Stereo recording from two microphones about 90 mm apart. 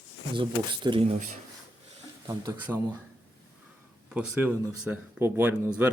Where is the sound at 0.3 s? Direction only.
60° right (ahead or behind).